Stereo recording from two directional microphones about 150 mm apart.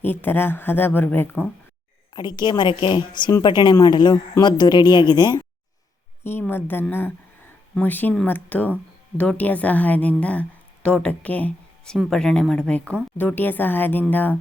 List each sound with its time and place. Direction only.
0.0 s a woman's voice: 15° left (ahead or behind)
2.1 s a woman's voice: 30° left (ahead or behind)
6.7 s a woman's voice: 15° left (ahead or behind)